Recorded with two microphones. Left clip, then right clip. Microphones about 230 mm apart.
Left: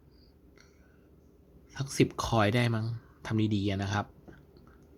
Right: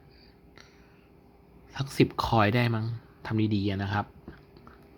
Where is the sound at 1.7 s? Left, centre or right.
Centre.